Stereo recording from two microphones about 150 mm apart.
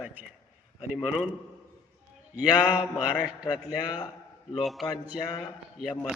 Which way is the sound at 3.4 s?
25° left (ahead or behind).